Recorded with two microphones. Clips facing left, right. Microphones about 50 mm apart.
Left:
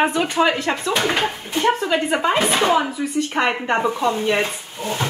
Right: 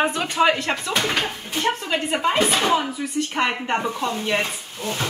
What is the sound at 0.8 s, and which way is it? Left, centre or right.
Speech, left.